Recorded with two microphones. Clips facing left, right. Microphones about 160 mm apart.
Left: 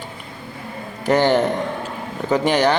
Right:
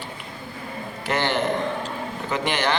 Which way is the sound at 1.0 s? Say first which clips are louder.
Left 7 dB; 40° left (ahead or behind).